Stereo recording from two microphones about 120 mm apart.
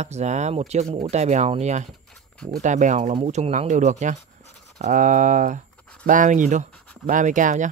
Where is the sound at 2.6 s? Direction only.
90° right.